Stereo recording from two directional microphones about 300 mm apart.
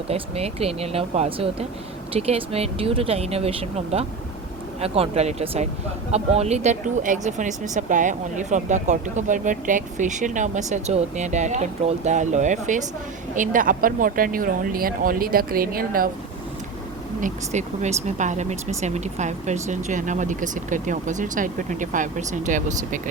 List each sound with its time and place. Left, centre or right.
0.1 s speech: centre
17.2 s speech: right